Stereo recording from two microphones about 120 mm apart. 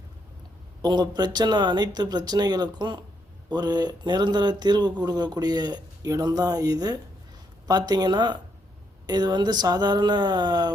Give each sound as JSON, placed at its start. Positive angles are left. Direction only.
{"t": 0.8, "sound": "speech", "side_deg": -35}